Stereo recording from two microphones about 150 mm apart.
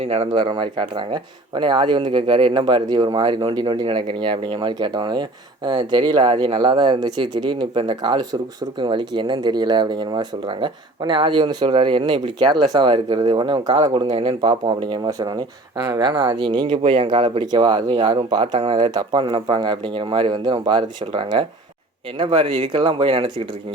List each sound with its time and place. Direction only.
0.0 s speech: 40° right (ahead or behind)